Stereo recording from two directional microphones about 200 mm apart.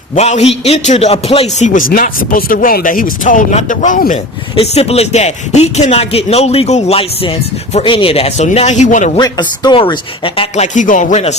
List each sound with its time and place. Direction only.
0.2 s speech: 30° left (ahead or behind)
4.5 s speech: 30° left (ahead or behind)
9.1 s speech: 20° left (ahead or behind)